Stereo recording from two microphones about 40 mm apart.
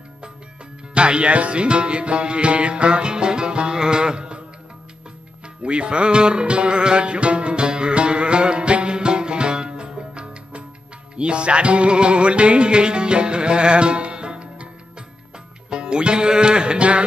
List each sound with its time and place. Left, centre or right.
0.9 s music: right
5.6 s speech: right
11.1 s music: right